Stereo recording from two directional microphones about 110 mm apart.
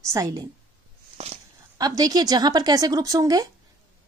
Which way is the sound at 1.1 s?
70° right (ahead or behind).